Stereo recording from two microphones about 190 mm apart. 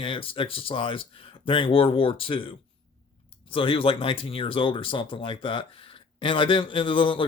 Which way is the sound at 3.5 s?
30° left (ahead or behind).